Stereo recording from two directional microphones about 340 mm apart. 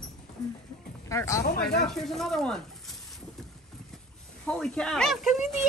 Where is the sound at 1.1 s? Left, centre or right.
Centre.